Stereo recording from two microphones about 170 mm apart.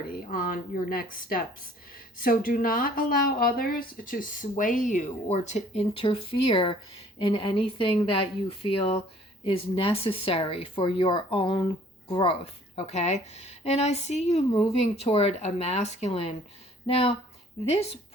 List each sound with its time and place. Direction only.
0.1 s a woman's voice: 55° left (ahead or behind); by 17.2 s 35° left (ahead or behind)